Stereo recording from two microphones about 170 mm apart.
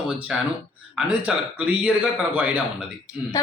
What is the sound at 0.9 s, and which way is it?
Speech, 5° right (ahead or behind).